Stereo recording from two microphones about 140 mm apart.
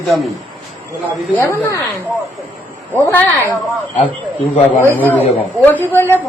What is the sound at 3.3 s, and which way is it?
Speech, 20° right (ahead or behind).